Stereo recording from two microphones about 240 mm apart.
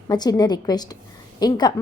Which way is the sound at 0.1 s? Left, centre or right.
Centre.